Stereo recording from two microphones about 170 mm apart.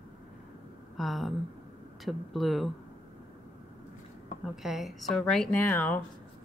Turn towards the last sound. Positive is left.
turn(degrees=10)  # may be behind; listen again after turning